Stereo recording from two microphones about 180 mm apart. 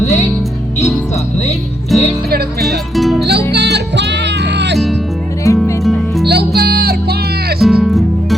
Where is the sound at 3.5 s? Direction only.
70° right (ahead or behind).